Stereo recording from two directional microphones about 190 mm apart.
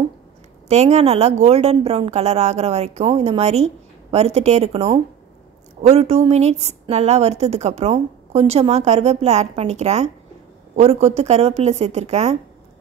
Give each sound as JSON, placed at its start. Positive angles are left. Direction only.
{"t": 0.7, "sound": "a woman's voice", "side_deg": -35}